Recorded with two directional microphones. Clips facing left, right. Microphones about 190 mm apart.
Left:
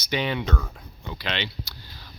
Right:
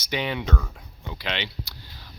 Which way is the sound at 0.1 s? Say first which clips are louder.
Left 1 dB; 10° right (ahead or behind).